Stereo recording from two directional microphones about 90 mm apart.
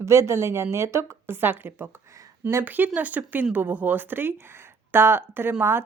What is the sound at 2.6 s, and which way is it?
A woman's voice, 20° right (ahead or behind).